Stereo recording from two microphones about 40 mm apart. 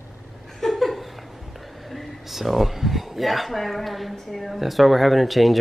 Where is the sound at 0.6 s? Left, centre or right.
Centre.